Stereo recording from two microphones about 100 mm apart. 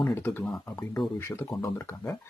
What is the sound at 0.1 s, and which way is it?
Speech, 20° left (ahead or behind).